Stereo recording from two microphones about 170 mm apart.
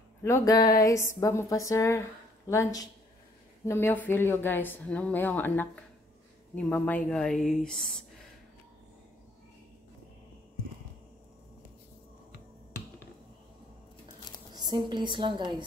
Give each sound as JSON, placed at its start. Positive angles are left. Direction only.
{"t": 0.2, "sound": "a woman's voice", "side_deg": 20}
{"t": 14.5, "sound": "a woman's voice", "side_deg": -25}